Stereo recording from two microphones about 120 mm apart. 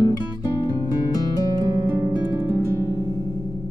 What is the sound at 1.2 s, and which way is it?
Music, 30° right (ahead or behind).